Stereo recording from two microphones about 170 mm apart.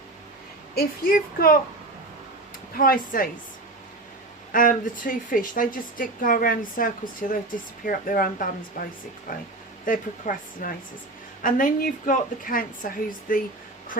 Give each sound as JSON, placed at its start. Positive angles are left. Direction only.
{"t": 0.8, "sound": "speech", "side_deg": 60}
{"t": 2.7, "sound": "speech", "side_deg": 55}
{"t": 4.5, "sound": "a woman's voice", "side_deg": 55}